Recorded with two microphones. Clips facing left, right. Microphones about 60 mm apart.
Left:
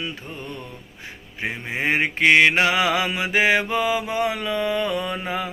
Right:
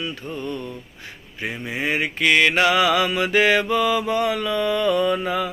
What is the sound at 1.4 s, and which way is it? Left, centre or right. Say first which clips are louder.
Male singing: even; left.